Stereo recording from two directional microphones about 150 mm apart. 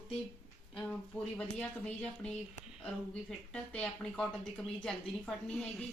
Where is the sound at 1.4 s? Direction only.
5° left (ahead or behind).